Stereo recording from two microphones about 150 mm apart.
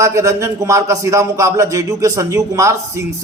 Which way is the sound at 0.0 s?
20° right (ahead or behind).